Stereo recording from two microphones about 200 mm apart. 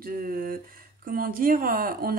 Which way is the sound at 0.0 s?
45° right (ahead or behind).